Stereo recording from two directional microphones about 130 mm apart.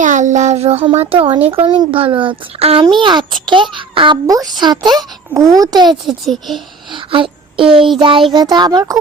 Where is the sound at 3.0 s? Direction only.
35° right (ahead or behind).